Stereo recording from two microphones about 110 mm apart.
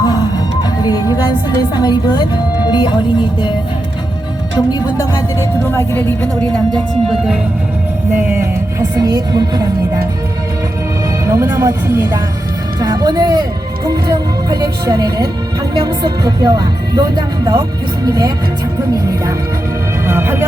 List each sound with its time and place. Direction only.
0.0 s music: 40° left (ahead or behind)
1.7 s a woman's voice: 40° left (ahead or behind)
4.5 s speech: 35° left (ahead or behind); by 6.1 s 20° left (ahead or behind)
9.0 s speech: 35° right (ahead or behind)
11.3 s speech: 25° right (ahead or behind)
12.8 s music: 35° right (ahead or behind)
13.8 s speech: 35° right (ahead or behind)
20.1 s music: 20° right (ahead or behind)